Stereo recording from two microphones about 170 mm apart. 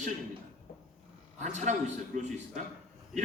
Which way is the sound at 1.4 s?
45° right (ahead or behind).